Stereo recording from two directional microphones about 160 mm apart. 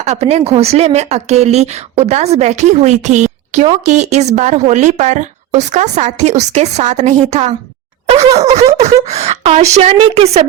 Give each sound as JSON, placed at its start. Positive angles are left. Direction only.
{"t": 0.0, "sound": "speech", "side_deg": -45}
{"t": 8.8, "sound": "speech", "side_deg": -45}